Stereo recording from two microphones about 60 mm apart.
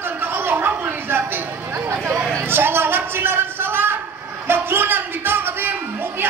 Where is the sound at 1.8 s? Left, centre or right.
Right.